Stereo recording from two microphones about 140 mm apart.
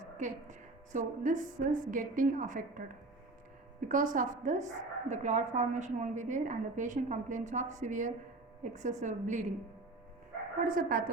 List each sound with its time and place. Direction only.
0.0 s a woman's voice: 60° right (ahead or behind)
10.6 s speech: 80° right